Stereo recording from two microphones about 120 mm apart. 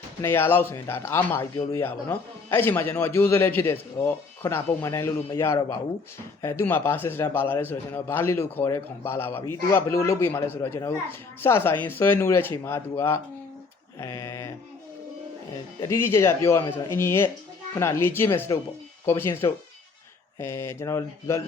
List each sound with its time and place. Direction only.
0.2 s a man's voice: 20° left (ahead or behind)
14.0 s a sound: 25° left (ahead or behind)
15.9 s a man's voice: 20° left (ahead or behind)